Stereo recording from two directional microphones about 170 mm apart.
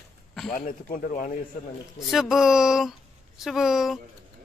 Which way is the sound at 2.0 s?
Centre (ahead or behind).